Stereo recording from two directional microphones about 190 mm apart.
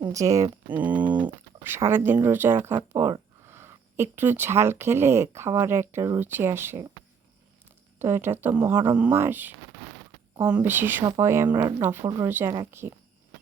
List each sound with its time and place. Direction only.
0.0 s speech: 15° right (ahead or behind)
7.9 s speech: 10° right (ahead or behind)